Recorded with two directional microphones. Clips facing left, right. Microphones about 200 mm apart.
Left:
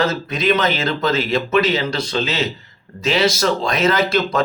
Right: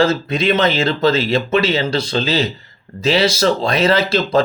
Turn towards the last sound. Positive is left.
turn(degrees=-30)  # may be behind; listen again after turning